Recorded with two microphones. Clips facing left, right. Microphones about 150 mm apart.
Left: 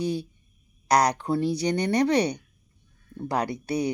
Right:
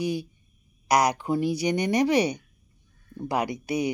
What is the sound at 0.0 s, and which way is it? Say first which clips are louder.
Speech: even; 10° right (ahead or behind).